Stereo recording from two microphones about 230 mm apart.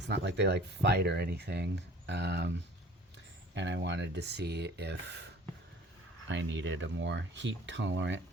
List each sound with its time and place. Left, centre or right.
0.0 s speech: right